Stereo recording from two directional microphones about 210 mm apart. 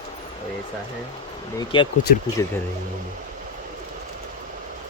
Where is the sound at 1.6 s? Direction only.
25° left (ahead or behind).